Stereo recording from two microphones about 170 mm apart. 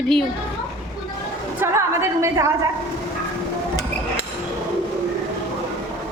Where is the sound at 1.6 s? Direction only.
15° right (ahead or behind).